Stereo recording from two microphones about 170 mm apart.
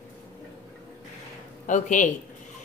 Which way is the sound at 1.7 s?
50° left (ahead or behind).